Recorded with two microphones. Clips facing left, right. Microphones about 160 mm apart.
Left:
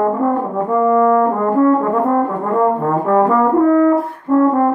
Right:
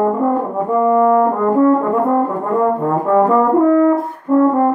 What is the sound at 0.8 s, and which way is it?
Brass instrument, 20° right (ahead or behind).